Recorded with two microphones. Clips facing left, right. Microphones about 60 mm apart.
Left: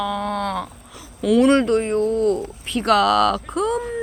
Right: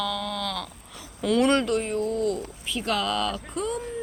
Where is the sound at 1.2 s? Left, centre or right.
Centre.